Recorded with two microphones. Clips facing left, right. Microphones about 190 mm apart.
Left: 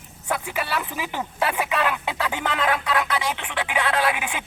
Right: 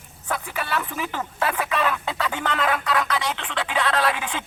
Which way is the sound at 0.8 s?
15° left (ahead or behind).